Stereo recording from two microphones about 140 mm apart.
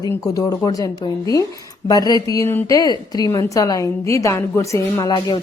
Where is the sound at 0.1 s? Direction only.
25° left (ahead or behind).